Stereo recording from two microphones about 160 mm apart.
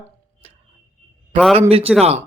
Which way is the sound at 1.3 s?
10° left (ahead or behind).